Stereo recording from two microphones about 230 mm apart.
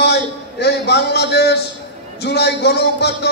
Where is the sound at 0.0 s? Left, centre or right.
Left.